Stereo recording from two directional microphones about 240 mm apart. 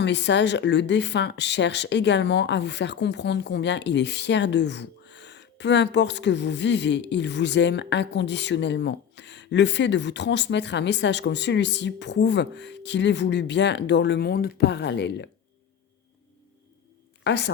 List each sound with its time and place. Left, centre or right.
0.0 s speech: left
17.2 s a woman's voice: left